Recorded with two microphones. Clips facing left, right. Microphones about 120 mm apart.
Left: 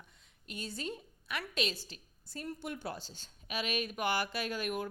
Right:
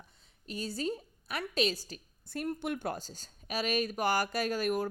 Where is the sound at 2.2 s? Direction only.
60° right (ahead or behind).